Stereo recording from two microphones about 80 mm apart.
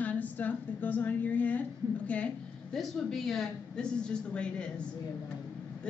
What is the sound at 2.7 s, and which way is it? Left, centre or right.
A woman's voice, centre.